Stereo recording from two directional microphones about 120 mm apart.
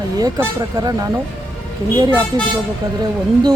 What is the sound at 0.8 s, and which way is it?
Speech, 30° right (ahead or behind).